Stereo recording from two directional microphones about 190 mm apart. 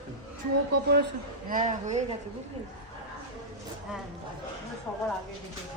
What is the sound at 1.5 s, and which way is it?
Speech, 40° right (ahead or behind).